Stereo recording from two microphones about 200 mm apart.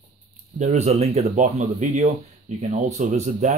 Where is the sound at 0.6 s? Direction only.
35° right (ahead or behind).